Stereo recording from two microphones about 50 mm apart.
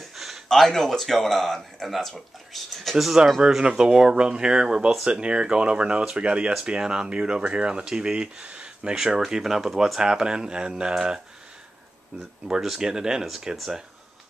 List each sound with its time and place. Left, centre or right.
0.0 s a sound: centre
0.5 s speech: centre
9.2 s speech: centre
12.6 s speech: centre